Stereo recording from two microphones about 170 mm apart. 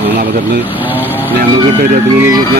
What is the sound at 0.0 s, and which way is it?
Vehicle, 65° right (ahead or behind).